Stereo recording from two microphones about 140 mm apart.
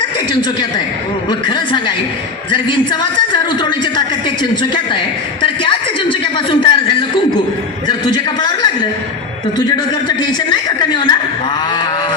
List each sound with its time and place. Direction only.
1.3 s a woman's voice: 35° left (ahead or behind)
5.4 s a sound: 35° left (ahead or behind)
7.9 s a man's voice: 30° left (ahead or behind)